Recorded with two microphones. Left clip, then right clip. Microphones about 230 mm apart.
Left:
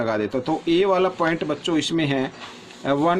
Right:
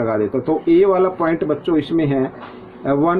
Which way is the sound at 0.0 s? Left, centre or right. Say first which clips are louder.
Right 4 dB; left.